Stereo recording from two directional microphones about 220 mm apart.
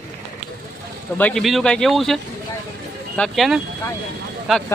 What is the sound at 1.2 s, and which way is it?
Speech, 5° left (ahead or behind).